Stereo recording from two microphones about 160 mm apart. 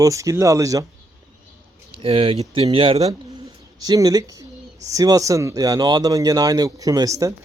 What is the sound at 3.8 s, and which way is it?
Speech, 20° right (ahead or behind).